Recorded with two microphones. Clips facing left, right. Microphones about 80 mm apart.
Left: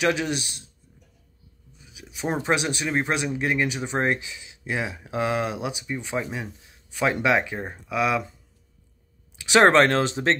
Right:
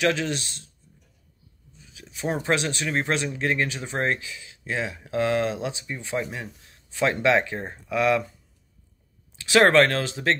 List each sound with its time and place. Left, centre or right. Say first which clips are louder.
0.0 s speech: even; centre
1.7 s speech: left 1 dB; centre
9.4 s speech: left 1 dB; left